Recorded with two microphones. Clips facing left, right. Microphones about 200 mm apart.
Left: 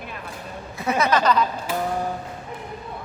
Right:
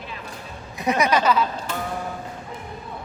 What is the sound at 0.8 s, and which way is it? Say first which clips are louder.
Speech: right 1 dB; 15° right (ahead or behind).